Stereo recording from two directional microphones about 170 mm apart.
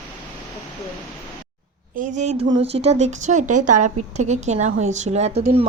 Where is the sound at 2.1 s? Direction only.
40° right (ahead or behind).